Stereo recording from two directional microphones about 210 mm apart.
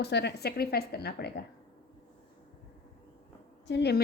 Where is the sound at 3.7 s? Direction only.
55° left (ahead or behind).